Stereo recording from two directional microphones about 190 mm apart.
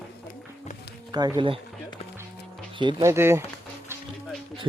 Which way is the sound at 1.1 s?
20° right (ahead or behind).